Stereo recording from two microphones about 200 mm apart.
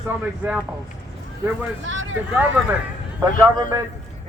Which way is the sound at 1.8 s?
75° right (ahead or behind).